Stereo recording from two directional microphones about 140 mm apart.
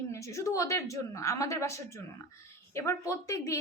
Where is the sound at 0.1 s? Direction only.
20° left (ahead or behind).